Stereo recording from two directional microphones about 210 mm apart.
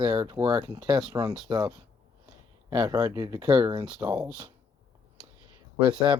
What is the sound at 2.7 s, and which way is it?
Speech, 15° right (ahead or behind).